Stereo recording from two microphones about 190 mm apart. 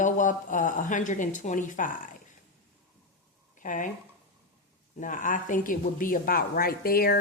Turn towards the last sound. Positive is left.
turn(degrees=50)  # may be behind; listen again after turning